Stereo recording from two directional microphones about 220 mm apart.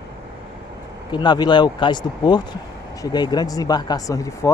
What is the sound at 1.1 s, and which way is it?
Speech, 20° left (ahead or behind).